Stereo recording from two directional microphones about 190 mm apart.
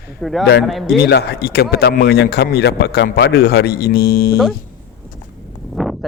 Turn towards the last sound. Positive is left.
turn(degrees=0)  # may be behind; listen again after turning